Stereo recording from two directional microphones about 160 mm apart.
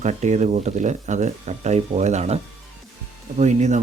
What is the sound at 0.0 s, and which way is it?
Speech, 45° right (ahead or behind).